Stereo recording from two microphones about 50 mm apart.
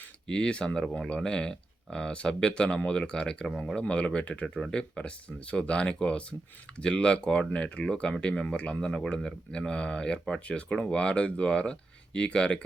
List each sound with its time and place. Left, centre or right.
0.3 s speech: centre
4.4 s speech: centre
4.7 s speech: centre